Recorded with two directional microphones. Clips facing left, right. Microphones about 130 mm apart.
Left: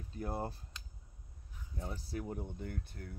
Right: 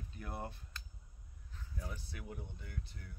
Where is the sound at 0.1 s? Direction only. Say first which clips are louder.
Left 7 dB; 35° left (ahead or behind).